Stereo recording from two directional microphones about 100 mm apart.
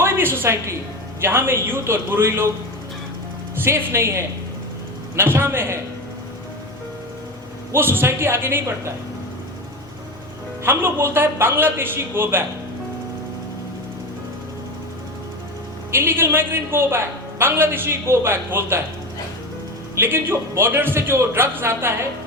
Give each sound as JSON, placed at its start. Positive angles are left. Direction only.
{"t": 0.0, "sound": "a woman's voice", "side_deg": -25}
{"t": 3.6, "sound": "a man's voice", "side_deg": -25}
{"t": 7.7, "sound": "a man's voice", "side_deg": -20}
{"t": 10.6, "sound": "a man's voice", "side_deg": -25}
{"t": 15.9, "sound": "a man's voice", "side_deg": -25}
{"t": 20.0, "sound": "a man's voice", "side_deg": -20}